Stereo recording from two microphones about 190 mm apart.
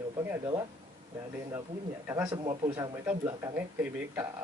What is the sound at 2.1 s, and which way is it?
Speech, 10° right (ahead or behind).